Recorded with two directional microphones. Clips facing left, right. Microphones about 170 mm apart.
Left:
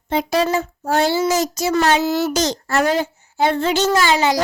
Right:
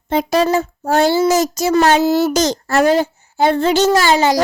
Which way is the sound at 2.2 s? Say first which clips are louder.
Right 4 dB; 45° right (ahead or behind).